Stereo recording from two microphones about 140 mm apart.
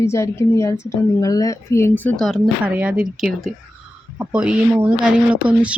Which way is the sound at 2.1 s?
Centre (ahead or behind).